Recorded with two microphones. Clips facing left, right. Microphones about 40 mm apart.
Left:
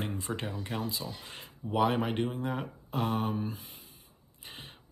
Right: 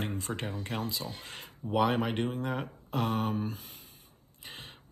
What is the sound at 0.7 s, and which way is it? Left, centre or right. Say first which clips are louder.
Speech: even; right.